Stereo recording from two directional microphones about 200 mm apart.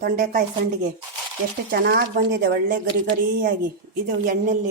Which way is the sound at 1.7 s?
50° right (ahead or behind).